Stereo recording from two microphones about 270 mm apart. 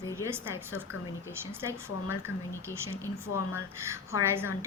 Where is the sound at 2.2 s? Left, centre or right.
Centre.